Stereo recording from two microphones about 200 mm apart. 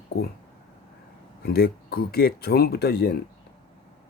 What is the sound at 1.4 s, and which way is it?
Speech, 50° left (ahead or behind).